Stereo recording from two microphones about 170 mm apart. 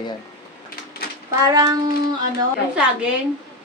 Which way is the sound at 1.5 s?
25° right (ahead or behind).